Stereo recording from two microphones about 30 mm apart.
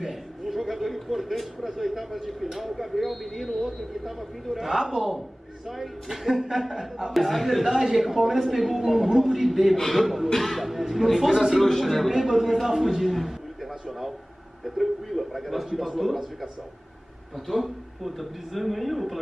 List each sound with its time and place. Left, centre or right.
0.5 s chatter: centre
1.8 s a man's voice: centre
4.6 s a man's voice: centre
5.7 s a man's voice: centre
7.6 s a man's voice: centre
8.0 s a man's voice: centre
10.3 s speech: centre
10.6 s speech: centre
11.8 s speech: centre
12.1 s a man's voice: centre
14.6 s speech: centre
17.5 s speech: centre